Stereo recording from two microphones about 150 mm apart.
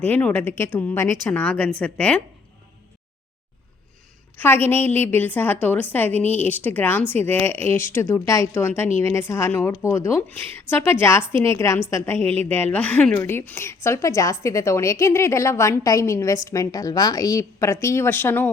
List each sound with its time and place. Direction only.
0.0 s a woman's voice: 10° left (ahead or behind)
4.4 s a woman's voice: 15° left (ahead or behind)